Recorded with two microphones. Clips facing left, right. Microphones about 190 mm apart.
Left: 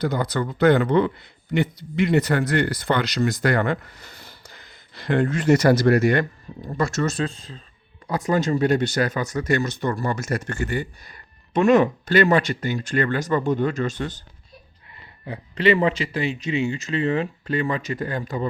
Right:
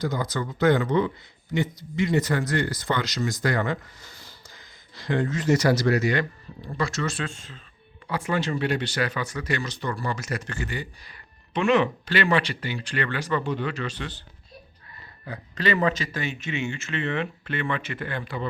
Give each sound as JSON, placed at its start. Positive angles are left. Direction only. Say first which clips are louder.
{"t": 0.0, "sound": "speech", "louder": "left 4 dB", "side_deg": 60}
{"t": 15.2, "sound": "speech", "louder": "left 6 dB", "side_deg": 30}